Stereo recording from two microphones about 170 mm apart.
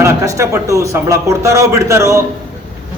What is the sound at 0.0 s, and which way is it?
A man's voice, 20° right (ahead or behind).